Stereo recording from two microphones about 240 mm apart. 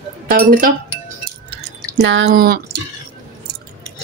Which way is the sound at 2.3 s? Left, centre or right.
Right.